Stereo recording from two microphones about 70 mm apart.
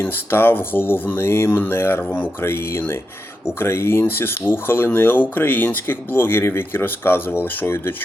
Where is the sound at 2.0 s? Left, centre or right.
Centre.